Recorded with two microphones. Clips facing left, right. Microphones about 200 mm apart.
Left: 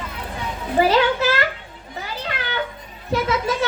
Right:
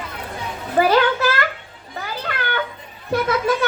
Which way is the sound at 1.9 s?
55° right (ahead or behind).